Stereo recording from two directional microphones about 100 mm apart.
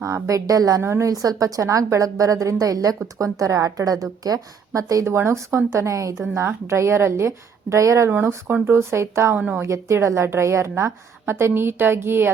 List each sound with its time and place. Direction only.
0.0 s a woman's voice: 30° right (ahead or behind)